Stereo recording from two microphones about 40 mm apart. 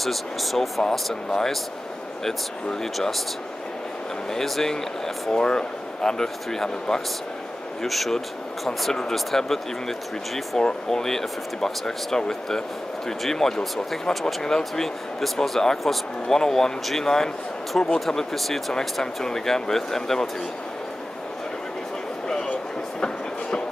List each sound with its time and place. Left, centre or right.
0.0 s speech: centre
4.3 s speech: centre
5.3 s speech: left
14.6 s speech: centre
16.3 s speech: centre
18.0 s speech: centre
22.9 s train: centre